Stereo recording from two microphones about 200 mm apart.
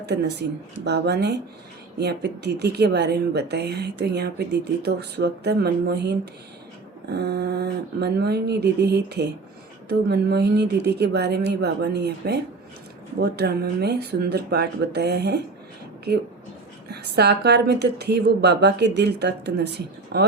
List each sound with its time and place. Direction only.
0.0 s a woman's voice: 55° right (ahead or behind)
16.9 s a woman's voice: 55° right (ahead or behind)